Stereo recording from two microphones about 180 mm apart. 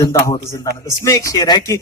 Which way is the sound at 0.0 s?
15° left (ahead or behind).